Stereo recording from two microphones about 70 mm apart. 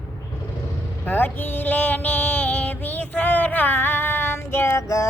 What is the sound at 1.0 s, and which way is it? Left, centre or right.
Music, left.